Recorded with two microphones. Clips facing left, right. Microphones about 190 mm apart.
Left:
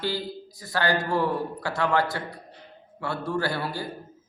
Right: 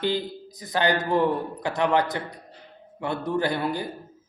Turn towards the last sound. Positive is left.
turn(degrees=-20)  # may be behind; listen again after turning